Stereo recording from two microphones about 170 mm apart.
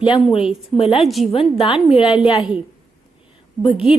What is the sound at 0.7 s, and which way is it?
Speech, 35° left (ahead or behind).